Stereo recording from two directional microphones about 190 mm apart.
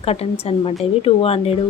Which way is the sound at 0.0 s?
30° left (ahead or behind).